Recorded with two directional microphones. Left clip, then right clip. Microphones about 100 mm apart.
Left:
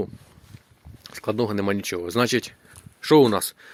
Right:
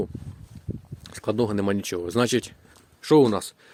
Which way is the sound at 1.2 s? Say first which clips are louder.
Even; 35° right (ahead or behind).